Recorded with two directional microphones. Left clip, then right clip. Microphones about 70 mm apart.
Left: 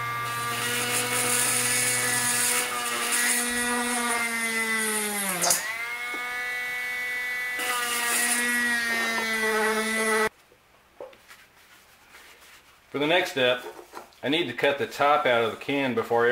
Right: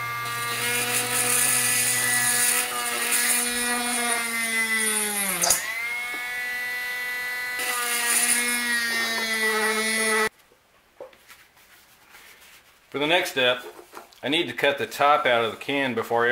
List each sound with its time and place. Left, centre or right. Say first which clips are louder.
0.0 s helicopter: right 1 dB; right
2.5 s motorboat: right 1 dB; right
7.8 s a sound: right 1 dB; centre
12.9 s speech: right 1 dB; right
13.6 s a sound: even; centre
14.2 s speech: right 2 dB; right